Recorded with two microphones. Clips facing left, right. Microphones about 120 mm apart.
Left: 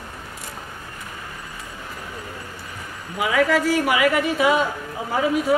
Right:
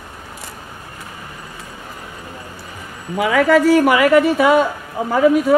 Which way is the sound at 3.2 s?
50° right (ahead or behind).